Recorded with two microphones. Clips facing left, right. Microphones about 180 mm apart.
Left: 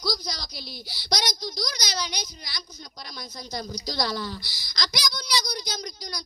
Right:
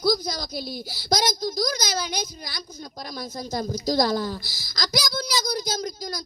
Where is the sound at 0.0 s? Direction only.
50° right (ahead or behind).